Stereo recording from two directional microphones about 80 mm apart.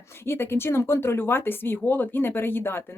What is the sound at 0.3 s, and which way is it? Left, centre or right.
Speech, left.